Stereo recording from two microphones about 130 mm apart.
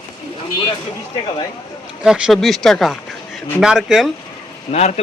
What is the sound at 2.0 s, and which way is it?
Speech, 5° right (ahead or behind).